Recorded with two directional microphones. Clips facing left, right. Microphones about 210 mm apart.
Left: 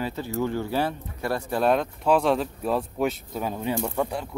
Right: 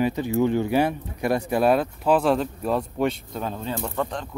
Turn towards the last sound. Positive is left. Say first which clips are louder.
# left 1 dB
turn(degrees=10)  # may be behind; listen again after turning